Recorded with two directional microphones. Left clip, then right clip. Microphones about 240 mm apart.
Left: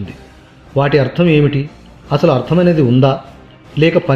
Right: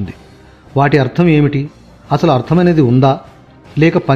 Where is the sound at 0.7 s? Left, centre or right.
Right.